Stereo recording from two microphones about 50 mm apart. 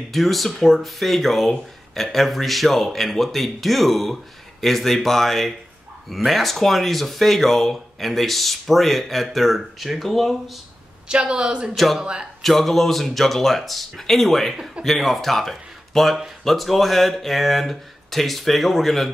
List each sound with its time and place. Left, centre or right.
0.1 s speech: centre
11.1 s speech: centre
11.7 s speech: centre
12.0 s speech: centre
12.4 s speech: centre